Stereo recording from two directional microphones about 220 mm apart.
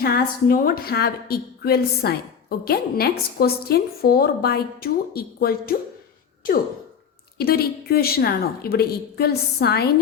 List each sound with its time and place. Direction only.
0.0 s a woman's voice: 45° left (ahead or behind)
7.3 s a woman's voice: 45° left (ahead or behind)